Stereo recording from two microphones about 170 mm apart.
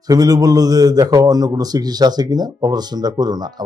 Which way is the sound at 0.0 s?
20° right (ahead or behind).